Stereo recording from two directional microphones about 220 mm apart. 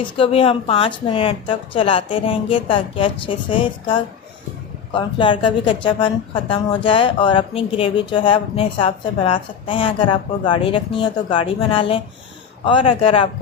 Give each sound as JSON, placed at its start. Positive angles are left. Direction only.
{"t": 0.0, "sound": "a woman's voice", "side_deg": 25}